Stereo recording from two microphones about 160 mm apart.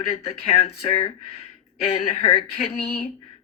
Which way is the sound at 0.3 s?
40° left (ahead or behind).